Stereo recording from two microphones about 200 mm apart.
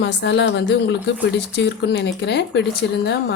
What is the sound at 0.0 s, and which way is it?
A woman's voice, 60° left (ahead or behind).